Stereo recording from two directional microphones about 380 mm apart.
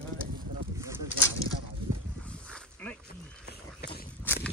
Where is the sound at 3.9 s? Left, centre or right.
Centre.